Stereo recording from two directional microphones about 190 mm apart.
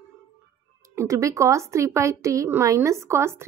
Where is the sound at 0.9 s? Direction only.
15° right (ahead or behind).